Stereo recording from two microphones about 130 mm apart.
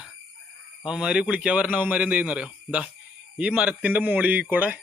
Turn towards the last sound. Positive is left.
turn(degrees=-15)  # may be behind; listen again after turning